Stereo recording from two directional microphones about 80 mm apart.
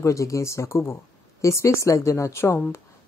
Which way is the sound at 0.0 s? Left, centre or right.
Left.